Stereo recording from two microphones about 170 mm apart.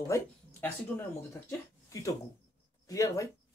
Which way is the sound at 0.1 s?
10° left (ahead or behind).